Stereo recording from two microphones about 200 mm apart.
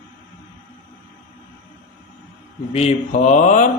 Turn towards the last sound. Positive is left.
turn(degrees=40)  # may be behind; listen again after turning